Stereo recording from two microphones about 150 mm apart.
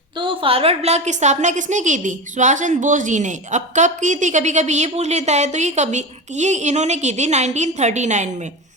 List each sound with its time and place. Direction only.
0.2 s a woman's voice: 35° right (ahead or behind); by 8.3 s 50° right (ahead or behind)